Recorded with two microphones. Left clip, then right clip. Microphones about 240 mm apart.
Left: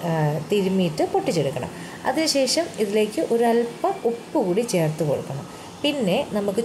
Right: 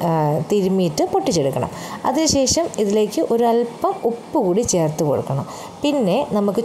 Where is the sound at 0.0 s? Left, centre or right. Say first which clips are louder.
Right 6 dB; right.